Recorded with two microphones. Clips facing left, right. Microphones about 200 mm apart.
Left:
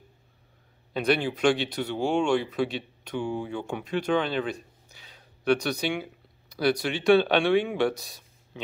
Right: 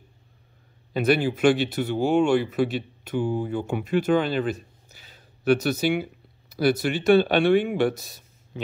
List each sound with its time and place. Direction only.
0.9 s speech: 5° right (ahead or behind)